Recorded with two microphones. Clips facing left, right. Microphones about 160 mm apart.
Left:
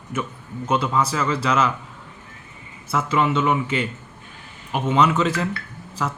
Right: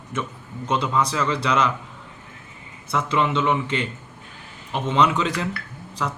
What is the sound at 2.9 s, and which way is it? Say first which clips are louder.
Speech: left 1 dB; 5° left (ahead or behind).